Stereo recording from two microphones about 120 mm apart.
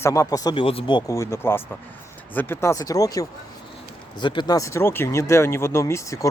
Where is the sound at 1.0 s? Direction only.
25° left (ahead or behind).